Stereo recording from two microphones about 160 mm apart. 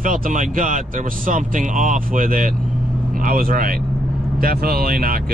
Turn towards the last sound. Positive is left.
turn(degrees=-65)  # may be behind; listen again after turning